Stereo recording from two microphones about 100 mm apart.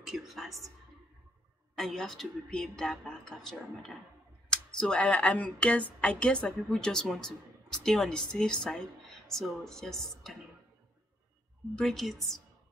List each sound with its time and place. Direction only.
0.0 s speech: centre (ahead or behind)
1.8 s speech: 5° left (ahead or behind)
11.7 s speech: 5° left (ahead or behind)